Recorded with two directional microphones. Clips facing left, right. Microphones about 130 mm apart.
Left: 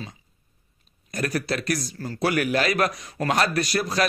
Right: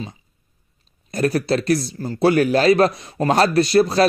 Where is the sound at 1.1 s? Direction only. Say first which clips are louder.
Right 7 dB; 30° right (ahead or behind).